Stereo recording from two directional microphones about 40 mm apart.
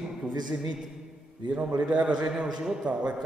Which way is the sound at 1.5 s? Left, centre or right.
Right.